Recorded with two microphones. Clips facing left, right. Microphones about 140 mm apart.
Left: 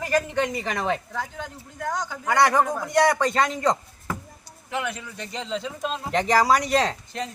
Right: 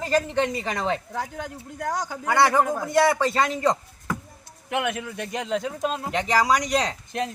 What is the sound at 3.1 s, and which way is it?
Speech, 25° right (ahead or behind).